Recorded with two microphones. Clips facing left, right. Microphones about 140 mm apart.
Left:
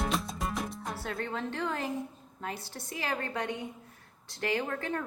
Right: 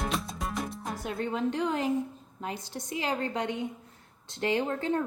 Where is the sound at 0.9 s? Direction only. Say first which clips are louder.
Right 5 dB; 15° right (ahead or behind).